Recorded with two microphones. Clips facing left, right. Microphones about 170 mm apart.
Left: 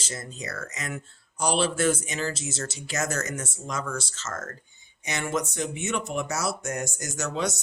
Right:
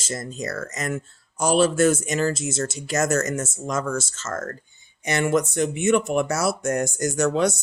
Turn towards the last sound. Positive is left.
turn(degrees=-55)  # may be behind; listen again after turning